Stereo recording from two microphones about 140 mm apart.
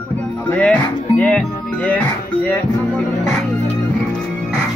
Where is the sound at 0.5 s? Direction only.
10° left (ahead or behind).